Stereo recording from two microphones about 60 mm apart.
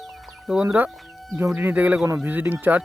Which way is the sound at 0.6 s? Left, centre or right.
Right.